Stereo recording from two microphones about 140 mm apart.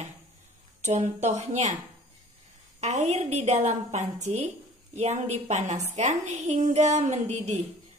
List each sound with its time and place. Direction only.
0.8 s a woman's voice: 55° right (ahead or behind)
2.8 s a woman's voice: 50° right (ahead or behind)